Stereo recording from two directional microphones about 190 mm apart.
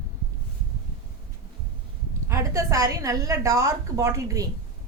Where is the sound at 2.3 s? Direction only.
15° right (ahead or behind).